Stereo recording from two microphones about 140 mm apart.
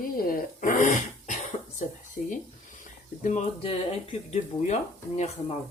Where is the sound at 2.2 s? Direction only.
75° left (ahead or behind).